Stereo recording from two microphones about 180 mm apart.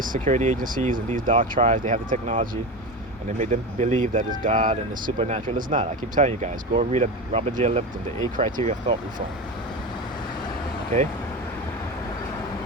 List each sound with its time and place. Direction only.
0.0 s speech: 45° right (ahead or behind)